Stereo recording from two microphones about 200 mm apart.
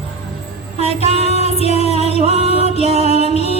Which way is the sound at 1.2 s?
30° left (ahead or behind).